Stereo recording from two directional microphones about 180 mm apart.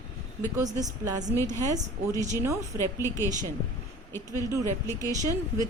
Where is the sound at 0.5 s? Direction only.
20° right (ahead or behind).